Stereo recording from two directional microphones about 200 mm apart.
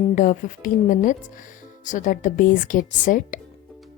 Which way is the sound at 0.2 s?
40° left (ahead or behind).